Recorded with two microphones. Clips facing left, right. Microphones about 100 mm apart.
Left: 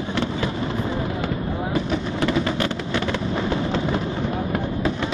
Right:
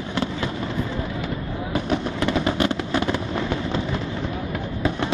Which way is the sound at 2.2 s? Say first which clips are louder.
Even; 20° right (ahead or behind).